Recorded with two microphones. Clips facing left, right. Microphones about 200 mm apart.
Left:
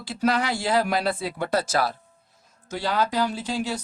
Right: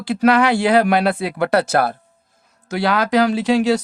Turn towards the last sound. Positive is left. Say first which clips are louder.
# right 12 dB
turn(degrees=-75)  # may be behind; listen again after turning